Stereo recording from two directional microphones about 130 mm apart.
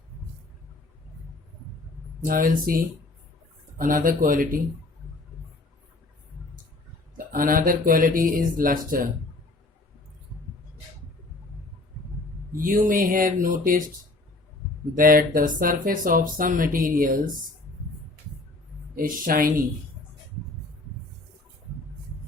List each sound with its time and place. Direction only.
2.2 s speech: 90° right
7.3 s speech: 90° right
12.5 s speech: 90° right
14.9 s speech: 90° right
18.9 s speech: 90° right